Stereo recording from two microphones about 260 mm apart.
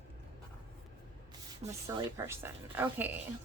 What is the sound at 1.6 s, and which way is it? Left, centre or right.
Speech, right.